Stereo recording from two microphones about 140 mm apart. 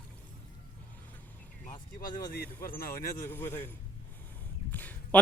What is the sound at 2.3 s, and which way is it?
Speech, 90° left.